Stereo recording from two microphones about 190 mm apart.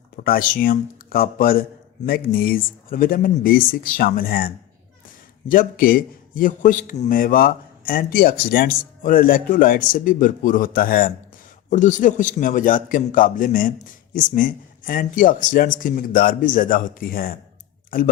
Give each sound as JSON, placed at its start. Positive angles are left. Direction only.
{"t": 0.3, "sound": "a man's voice", "side_deg": 45}